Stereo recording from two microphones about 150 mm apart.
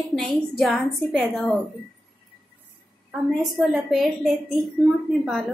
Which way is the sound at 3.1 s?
5° right (ahead or behind).